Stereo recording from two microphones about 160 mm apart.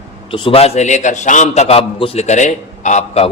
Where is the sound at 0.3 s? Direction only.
35° left (ahead or behind).